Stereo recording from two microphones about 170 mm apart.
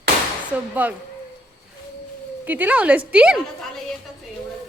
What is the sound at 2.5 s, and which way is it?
Speech, 10° right (ahead or behind).